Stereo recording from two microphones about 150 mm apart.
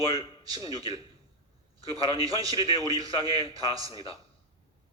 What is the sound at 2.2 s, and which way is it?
A man's voice, 25° right (ahead or behind).